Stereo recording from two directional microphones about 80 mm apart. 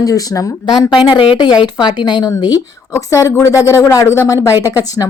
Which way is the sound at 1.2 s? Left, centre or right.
Left.